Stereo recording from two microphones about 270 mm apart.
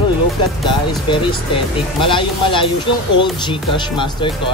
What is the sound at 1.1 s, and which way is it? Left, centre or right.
Speech, centre.